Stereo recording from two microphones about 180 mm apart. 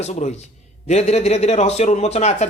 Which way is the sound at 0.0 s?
40° left (ahead or behind).